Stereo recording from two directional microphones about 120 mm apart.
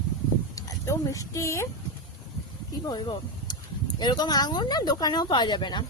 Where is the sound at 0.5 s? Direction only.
25° left (ahead or behind).